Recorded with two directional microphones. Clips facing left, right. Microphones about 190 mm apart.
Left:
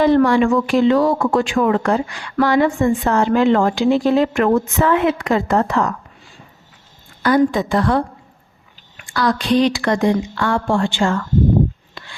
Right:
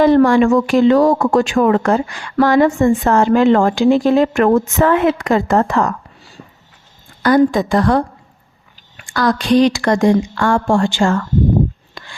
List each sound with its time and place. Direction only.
0.0 s a woman's voice: 45° right (ahead or behind)
7.2 s a woman's voice: 45° right (ahead or behind)
9.0 s a woman's voice: 45° right (ahead or behind)